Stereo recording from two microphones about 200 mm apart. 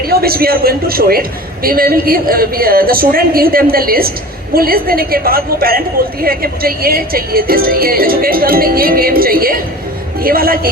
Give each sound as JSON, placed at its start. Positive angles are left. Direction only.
{"t": 0.0, "sound": "speech", "side_deg": -50}